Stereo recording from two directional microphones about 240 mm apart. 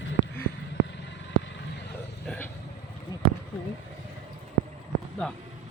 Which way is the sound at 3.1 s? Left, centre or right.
Centre.